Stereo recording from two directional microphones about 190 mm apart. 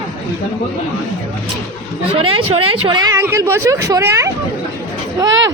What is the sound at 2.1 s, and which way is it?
Speech, 30° right (ahead or behind).